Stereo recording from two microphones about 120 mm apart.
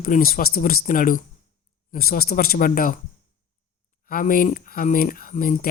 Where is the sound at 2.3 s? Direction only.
90° left.